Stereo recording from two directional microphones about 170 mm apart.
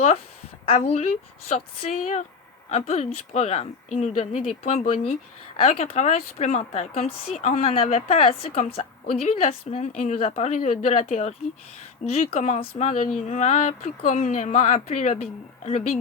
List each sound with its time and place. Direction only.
0.6 s a woman's voice: 35° left (ahead or behind)